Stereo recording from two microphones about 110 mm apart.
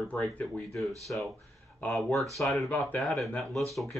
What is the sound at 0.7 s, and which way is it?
Speech, centre (ahead or behind).